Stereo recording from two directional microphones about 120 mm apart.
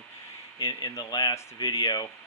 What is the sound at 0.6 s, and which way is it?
Speech, 35° left (ahead or behind).